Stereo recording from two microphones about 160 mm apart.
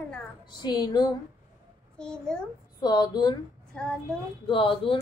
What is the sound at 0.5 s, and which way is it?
Speech, 25° left (ahead or behind).